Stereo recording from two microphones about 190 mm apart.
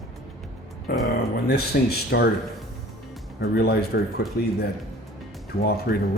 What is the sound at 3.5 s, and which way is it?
Speech, 55° left (ahead or behind).